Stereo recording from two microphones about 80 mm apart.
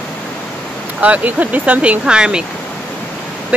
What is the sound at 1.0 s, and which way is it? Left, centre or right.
Speech, centre.